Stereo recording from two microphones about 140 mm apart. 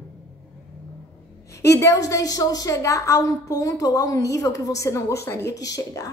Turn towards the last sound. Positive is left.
turn(degrees=25)  # may be behind; listen again after turning